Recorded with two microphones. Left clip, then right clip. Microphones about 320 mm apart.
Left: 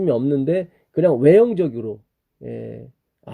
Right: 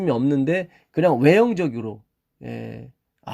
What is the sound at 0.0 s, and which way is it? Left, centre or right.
Speech, centre.